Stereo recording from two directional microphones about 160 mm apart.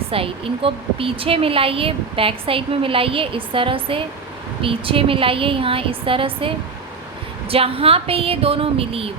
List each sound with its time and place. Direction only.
0.1 s a woman's voice: 35° right (ahead or behind)
7.5 s a woman's voice: 35° right (ahead or behind)